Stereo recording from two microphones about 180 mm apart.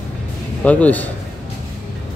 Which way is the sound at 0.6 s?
10° left (ahead or behind).